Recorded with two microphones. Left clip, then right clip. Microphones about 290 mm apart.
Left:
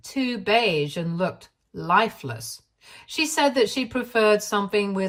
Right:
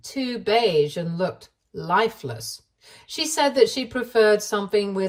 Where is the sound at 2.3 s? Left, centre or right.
Left.